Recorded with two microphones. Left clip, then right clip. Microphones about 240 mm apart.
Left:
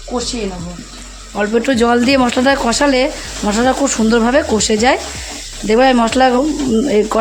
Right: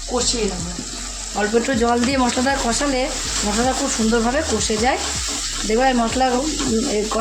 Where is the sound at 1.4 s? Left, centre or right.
Left.